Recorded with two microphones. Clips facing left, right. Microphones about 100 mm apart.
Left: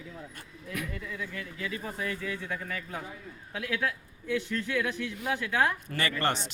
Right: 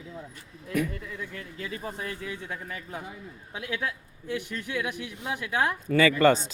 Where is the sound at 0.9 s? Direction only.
40° right (ahead or behind).